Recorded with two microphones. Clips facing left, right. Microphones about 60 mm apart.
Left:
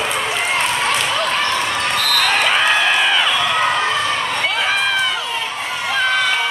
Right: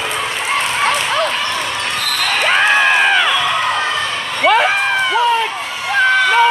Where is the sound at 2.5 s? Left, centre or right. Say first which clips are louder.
Right 3 dB; right.